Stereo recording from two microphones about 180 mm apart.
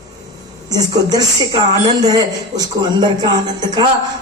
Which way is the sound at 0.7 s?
20° right (ahead or behind).